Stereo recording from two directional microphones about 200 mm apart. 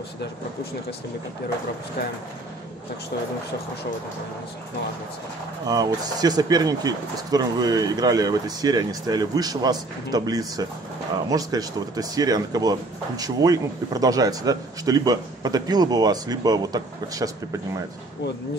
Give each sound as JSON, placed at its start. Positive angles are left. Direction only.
{"t": 5.7, "sound": "speech", "side_deg": -20}